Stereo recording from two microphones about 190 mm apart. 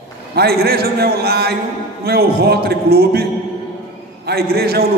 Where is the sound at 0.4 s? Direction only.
55° right (ahead or behind).